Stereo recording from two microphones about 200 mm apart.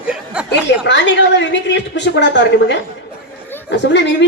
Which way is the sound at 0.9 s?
60° left (ahead or behind).